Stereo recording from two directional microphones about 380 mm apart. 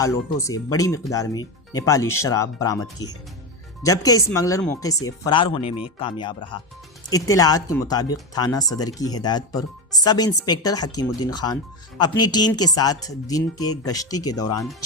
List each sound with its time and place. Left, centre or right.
0.0 s speech: centre
5.6 s speech: left
6.0 s speech: centre